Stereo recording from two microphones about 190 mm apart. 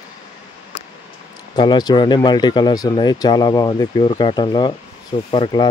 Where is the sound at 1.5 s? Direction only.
20° left (ahead or behind).